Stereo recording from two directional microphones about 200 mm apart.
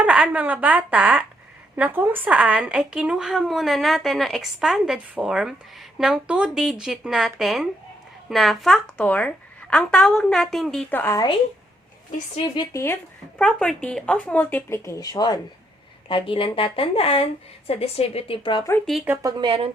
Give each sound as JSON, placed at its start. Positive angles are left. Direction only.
{"t": 0.0, "sound": "a woman's voice", "side_deg": -5}
{"t": 12.5, "sound": "speech", "side_deg": 15}
{"t": 18.9, "sound": "a woman's voice", "side_deg": -5}
{"t": 19.4, "sound": "speech", "side_deg": -25}